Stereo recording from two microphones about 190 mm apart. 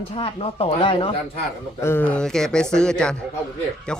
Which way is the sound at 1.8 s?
10° left (ahead or behind).